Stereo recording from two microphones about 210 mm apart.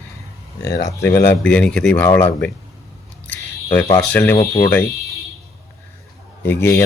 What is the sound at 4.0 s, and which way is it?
Speech, 10° left (ahead or behind).